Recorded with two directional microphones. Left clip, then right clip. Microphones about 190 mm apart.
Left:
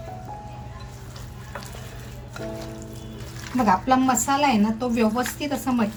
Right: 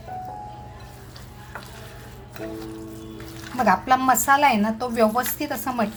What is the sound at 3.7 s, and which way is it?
A woman's voice, 35° right (ahead or behind).